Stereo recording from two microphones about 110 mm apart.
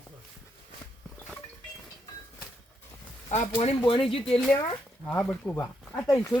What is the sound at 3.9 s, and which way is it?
Speech, 60° left (ahead or behind).